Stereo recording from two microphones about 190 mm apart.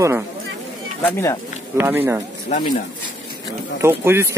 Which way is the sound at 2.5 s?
50° left (ahead or behind).